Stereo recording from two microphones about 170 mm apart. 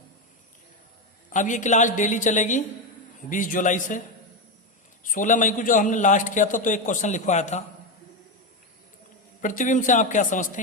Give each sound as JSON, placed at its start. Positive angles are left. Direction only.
{"t": 1.3, "sound": "a man's voice", "side_deg": 45}
{"t": 5.0, "sound": "a man's voice", "side_deg": 50}
{"t": 9.4, "sound": "a man's voice", "side_deg": 50}